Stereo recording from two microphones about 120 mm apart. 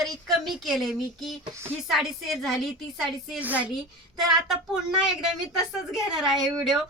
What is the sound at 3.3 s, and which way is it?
A woman's voice, 15° right (ahead or behind).